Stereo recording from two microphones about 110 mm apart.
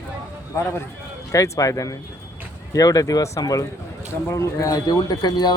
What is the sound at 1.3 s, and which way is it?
Speech, 30° left (ahead or behind).